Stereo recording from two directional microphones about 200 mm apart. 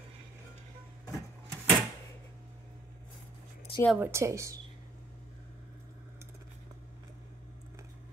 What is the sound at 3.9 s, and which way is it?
Speech, 10° right (ahead or behind).